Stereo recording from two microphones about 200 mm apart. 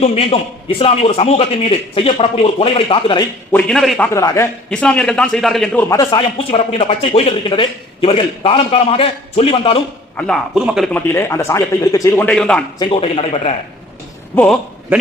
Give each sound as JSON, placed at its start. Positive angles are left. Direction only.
{"t": 0.0, "sound": "a man's voice", "side_deg": 30}
{"t": 3.5, "sound": "a man's voice", "side_deg": 5}
{"t": 4.1, "sound": "a man's voice", "side_deg": 15}
{"t": 4.7, "sound": "a man's voice", "side_deg": 5}
{"t": 5.9, "sound": "a man's voice", "side_deg": 20}
{"t": 6.3, "sound": "a man's voice", "side_deg": 30}
{"t": 10.2, "sound": "a man's voice", "side_deg": 0}
{"t": 10.9, "sound": "a man's voice", "side_deg": 15}
{"t": 12.8, "sound": "a man's voice", "side_deg": 30}
{"t": 14.3, "sound": "a man's voice", "side_deg": 5}